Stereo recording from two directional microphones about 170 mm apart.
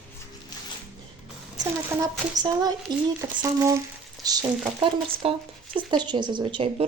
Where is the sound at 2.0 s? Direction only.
20° right (ahead or behind).